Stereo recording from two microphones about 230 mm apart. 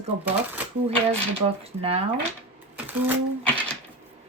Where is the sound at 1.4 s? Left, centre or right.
Right.